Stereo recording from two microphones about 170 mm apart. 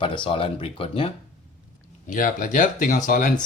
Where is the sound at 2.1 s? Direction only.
50° left (ahead or behind).